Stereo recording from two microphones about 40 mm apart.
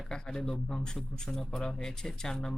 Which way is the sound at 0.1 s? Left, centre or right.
Left.